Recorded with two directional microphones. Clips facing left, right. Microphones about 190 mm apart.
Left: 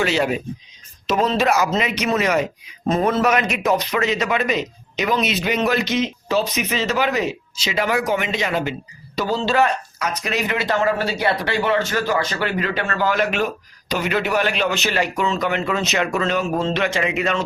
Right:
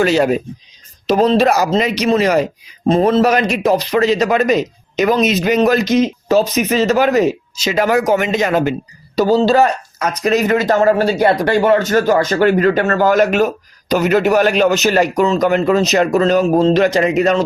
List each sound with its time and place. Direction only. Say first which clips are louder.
0.0 s speech: right 7 dB; 40° right (ahead or behind)